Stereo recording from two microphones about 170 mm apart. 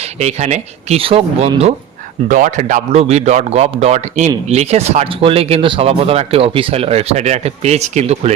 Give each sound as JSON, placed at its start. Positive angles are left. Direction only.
{"t": 0.0, "sound": "speech", "side_deg": -40}
{"t": 2.2, "sound": "speech", "side_deg": -50}